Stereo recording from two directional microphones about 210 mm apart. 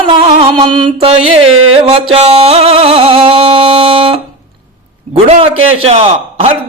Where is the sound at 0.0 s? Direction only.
25° right (ahead or behind).